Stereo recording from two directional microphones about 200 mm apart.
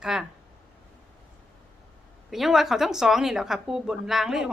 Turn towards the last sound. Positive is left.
turn(degrees=0)  # may be behind; listen again after turning